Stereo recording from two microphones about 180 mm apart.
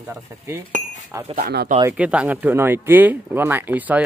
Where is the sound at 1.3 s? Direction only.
60° right (ahead or behind).